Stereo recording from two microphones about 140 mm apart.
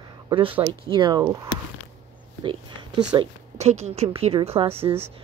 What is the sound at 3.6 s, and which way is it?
A woman's voice, 50° right (ahead or behind).